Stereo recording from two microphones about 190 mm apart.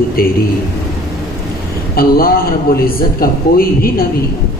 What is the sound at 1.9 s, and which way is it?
A woman's voice, 50° left (ahead or behind).